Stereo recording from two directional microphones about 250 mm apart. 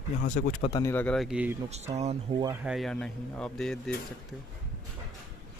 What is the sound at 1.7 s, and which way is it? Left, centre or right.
Speech, right.